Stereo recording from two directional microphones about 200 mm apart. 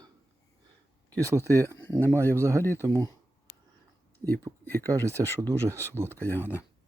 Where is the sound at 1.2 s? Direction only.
15° right (ahead or behind).